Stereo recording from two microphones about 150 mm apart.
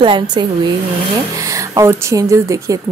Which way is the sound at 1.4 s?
20° right (ahead or behind).